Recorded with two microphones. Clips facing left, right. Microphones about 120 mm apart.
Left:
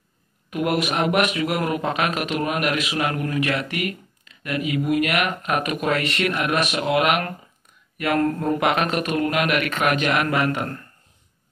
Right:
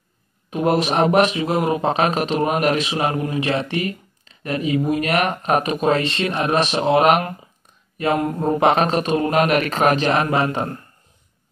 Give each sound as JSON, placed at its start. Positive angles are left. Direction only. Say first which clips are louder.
{"t": 0.5, "sound": "speech", "louder": "right 4 dB", "side_deg": -30}
{"t": 8.2, "sound": "speech", "louder": "left 1 dB", "side_deg": -15}
{"t": 8.5, "sound": "speech", "louder": "right 4 dB", "side_deg": -30}